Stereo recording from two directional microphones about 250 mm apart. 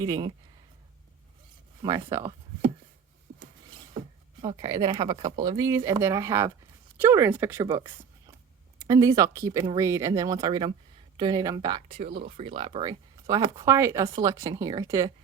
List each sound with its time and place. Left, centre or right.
0.0 s speech: centre
1.8 s speech: centre
4.4 s speech: centre